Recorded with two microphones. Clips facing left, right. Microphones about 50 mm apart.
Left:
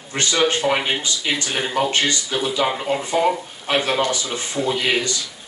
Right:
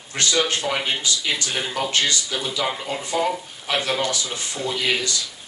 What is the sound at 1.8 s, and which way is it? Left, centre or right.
Speech, left.